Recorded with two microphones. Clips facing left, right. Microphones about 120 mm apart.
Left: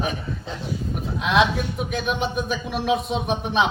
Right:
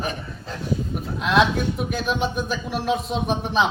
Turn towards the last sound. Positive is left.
turn(degrees=0)  # may be behind; listen again after turning